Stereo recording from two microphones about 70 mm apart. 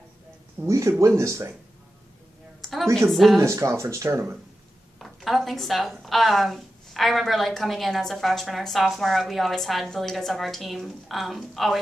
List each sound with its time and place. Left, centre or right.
0.7 s speech: right
2.6 s a sound: centre
3.1 s a woman's voice: centre
3.3 s speech: right
4.9 s a woman's voice: centre